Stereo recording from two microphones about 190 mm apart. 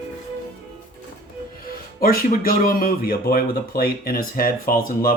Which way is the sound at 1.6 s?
50° left (ahead or behind).